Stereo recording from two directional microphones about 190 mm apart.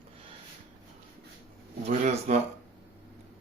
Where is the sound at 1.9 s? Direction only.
40° right (ahead or behind).